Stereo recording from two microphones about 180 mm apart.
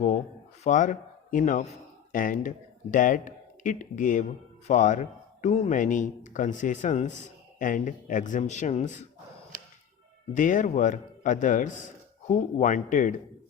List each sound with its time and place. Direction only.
0.6 s a man's voice: 45° left (ahead or behind)
10.3 s a man's voice: 45° left (ahead or behind)